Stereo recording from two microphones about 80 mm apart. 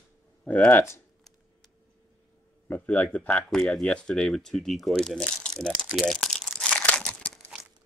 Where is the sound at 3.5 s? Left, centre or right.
Centre.